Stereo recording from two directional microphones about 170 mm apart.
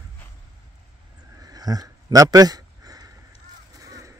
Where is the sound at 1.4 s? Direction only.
20° right (ahead or behind).